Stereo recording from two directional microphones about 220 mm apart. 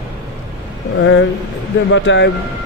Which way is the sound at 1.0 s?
55° left (ahead or behind).